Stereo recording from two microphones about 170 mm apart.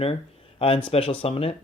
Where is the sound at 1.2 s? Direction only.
35° left (ahead or behind).